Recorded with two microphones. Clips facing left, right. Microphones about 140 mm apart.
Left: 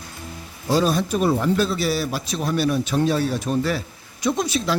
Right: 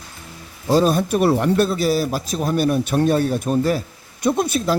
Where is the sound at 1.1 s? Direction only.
65° right (ahead or behind).